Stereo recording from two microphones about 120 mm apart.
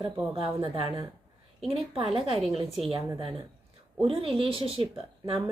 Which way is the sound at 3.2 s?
45° right (ahead or behind).